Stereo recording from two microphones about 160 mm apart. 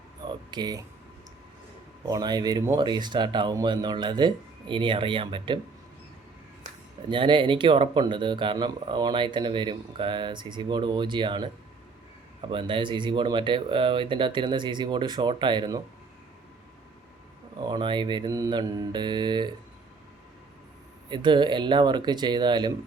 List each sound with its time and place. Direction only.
0.3 s a sound: 25° right (ahead or behind)
2.0 s speech: 25° right (ahead or behind)
7.1 s speech: 30° right (ahead or behind)
17.6 s speech: 30° right (ahead or behind)
21.1 s speech: 30° right (ahead or behind)